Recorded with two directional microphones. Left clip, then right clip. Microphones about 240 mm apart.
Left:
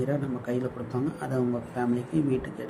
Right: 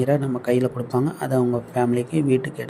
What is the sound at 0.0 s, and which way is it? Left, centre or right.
A man's voice, right.